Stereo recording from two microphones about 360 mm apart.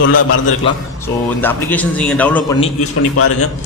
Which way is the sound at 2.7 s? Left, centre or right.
Left.